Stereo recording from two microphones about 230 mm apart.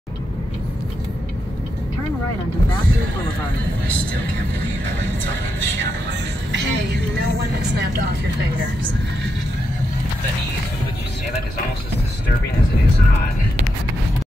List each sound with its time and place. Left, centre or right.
6.5 s vehicle: right